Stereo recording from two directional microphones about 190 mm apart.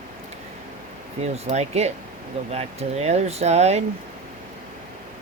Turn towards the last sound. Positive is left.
turn(degrees=-35)  # may be behind; listen again after turning